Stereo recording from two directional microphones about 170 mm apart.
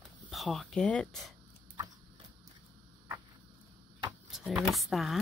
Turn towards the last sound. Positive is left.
turn(degrees=0)  # may be behind; listen again after turning